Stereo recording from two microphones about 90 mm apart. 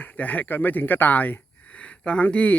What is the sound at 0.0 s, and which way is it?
Speech, 20° left (ahead or behind).